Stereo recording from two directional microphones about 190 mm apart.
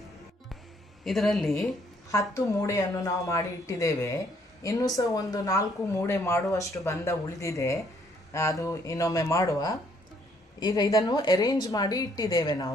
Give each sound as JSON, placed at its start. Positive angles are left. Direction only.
{"t": 1.0, "sound": "speech", "side_deg": 0}
{"t": 2.0, "sound": "speech", "side_deg": 15}